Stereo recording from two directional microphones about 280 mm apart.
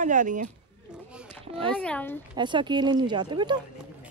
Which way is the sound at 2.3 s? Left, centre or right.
Centre.